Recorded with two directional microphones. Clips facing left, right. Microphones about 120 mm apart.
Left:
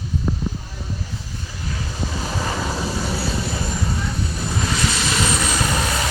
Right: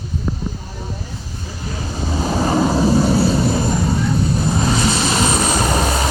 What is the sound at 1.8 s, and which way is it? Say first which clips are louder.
Vehicle: right 6 dB; 35° right (ahead or behind).